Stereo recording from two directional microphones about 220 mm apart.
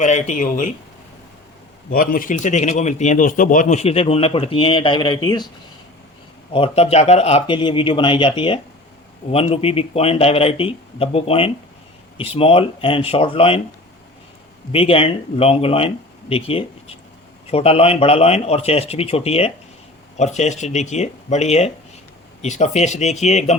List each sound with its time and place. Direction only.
0.0 s speech: 35° left (ahead or behind)
1.9 s speech: 40° left (ahead or behind); by 5.5 s 20° left (ahead or behind)
6.5 s speech: 25° left (ahead or behind)
14.7 s speech: 25° left (ahead or behind)